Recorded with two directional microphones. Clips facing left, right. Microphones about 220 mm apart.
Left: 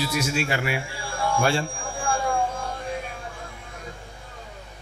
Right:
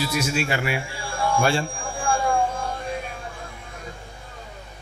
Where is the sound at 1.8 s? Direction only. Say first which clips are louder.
Right 2 dB; 25° right (ahead or behind).